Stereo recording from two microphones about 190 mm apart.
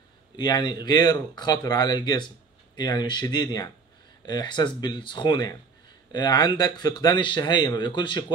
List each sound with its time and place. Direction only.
0.4 s speech: 20° left (ahead or behind)